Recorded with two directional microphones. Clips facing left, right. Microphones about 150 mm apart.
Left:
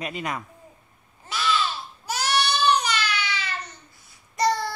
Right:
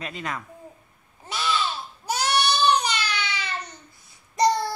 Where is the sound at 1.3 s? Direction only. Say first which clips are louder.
Left 1 dB; 20° right (ahead or behind).